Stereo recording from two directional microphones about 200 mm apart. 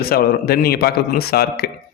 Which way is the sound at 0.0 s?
50° left (ahead or behind).